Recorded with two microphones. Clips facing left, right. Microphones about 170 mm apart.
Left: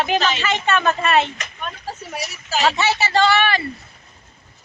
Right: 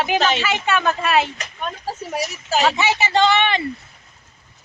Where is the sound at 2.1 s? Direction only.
45° right (ahead or behind).